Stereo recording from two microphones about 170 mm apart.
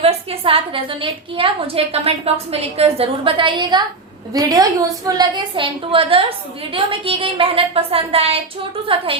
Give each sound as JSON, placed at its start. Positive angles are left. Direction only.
{"t": 0.0, "sound": "a woman's voice", "side_deg": -35}